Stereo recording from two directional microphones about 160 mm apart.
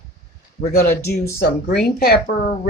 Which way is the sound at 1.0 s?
80° left.